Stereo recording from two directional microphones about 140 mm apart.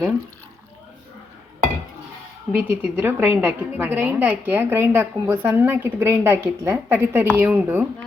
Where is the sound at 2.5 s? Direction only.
15° right (ahead or behind).